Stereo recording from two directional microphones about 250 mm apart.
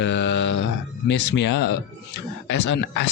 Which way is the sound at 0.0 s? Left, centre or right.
Left.